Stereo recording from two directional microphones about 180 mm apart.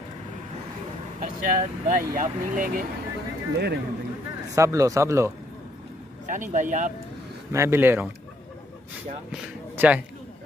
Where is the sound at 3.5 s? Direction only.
65° right (ahead or behind).